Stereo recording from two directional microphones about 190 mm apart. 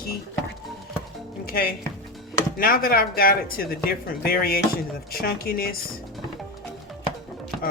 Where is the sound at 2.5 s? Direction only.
50° left (ahead or behind).